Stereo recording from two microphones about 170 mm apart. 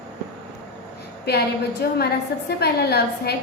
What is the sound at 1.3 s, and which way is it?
A woman's voice, 70° left (ahead or behind).